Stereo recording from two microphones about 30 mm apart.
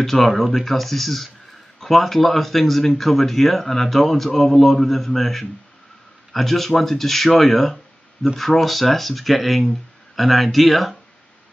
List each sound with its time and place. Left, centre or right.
0.0 s speech: centre